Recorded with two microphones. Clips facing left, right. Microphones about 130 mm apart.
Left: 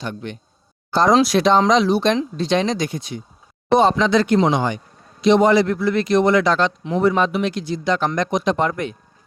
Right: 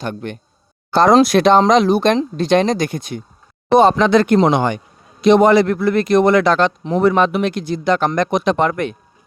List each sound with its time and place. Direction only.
0.0 s speech: 55° right (ahead or behind)